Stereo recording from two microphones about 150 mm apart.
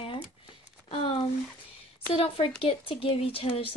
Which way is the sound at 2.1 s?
40° left (ahead or behind).